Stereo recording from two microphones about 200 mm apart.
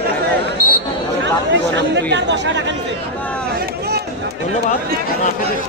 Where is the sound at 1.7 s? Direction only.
60° right (ahead or behind).